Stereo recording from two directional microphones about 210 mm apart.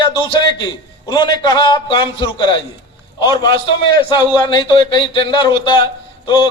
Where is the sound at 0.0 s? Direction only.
25° left (ahead or behind).